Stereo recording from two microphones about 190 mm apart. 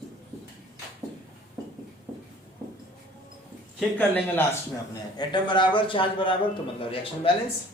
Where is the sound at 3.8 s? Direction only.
10° left (ahead or behind).